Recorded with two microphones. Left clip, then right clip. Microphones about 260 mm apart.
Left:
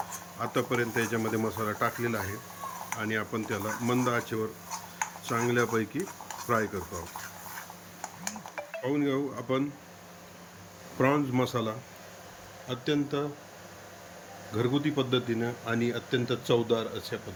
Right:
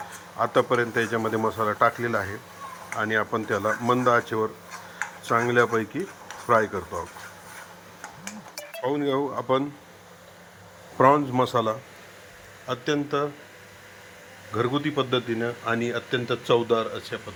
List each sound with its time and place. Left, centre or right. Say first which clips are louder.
0.3 s speech: right 8 dB; centre
8.9 s speech: right 5 dB; centre
10.9 s speech: right 8 dB; centre
14.5 s speech: right 4 dB; centre